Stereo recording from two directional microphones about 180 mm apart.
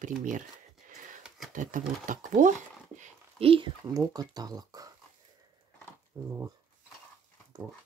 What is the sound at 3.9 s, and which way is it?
Speech, 20° right (ahead or behind).